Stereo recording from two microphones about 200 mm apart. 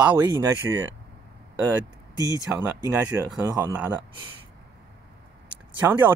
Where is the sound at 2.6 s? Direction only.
15° right (ahead or behind).